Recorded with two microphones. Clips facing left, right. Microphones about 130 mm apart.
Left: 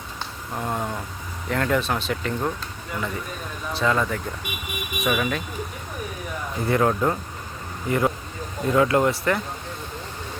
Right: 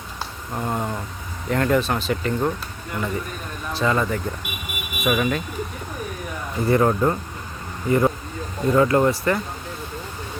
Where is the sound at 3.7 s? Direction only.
Centre (ahead or behind).